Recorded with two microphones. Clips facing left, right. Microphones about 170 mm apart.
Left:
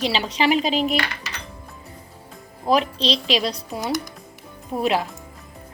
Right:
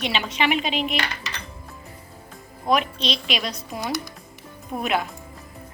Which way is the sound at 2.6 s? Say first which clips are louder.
Left 3 dB; 30° left (ahead or behind).